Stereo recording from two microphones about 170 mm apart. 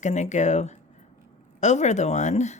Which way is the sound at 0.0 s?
45° left (ahead or behind).